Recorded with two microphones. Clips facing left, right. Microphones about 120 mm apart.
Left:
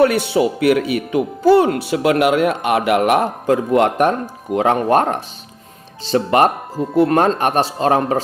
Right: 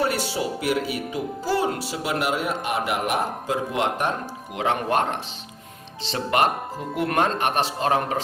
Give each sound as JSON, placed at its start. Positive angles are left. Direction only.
{"t": 0.0, "sound": "speech", "side_deg": 65}
{"t": 4.5, "sound": "speech", "side_deg": 45}